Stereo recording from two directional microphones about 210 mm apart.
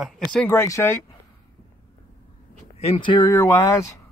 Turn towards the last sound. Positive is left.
turn(degrees=15)  # may be behind; listen again after turning